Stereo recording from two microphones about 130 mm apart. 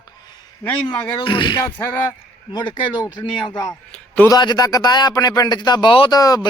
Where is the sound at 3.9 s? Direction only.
10° left (ahead or behind).